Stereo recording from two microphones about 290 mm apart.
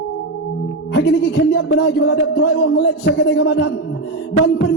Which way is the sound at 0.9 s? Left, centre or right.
Left.